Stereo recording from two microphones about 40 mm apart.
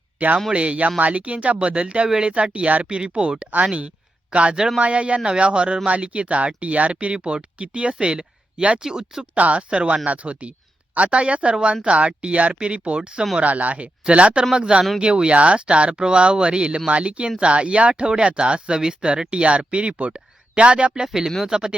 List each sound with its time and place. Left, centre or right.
0.2 s speech: right; by 9.2 s centre
9.3 s speech: right; by 21.8 s centre